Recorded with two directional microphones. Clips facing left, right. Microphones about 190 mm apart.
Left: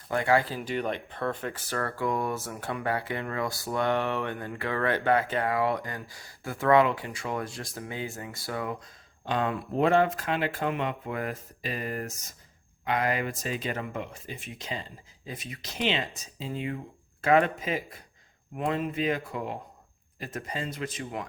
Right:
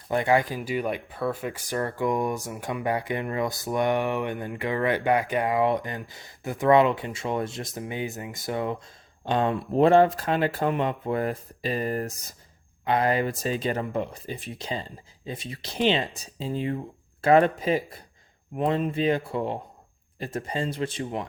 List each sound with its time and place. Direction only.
0.1 s speech: 20° right (ahead or behind)